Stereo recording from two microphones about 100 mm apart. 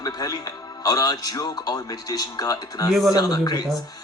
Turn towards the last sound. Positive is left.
turn(degrees=40)  # may be behind; listen again after turning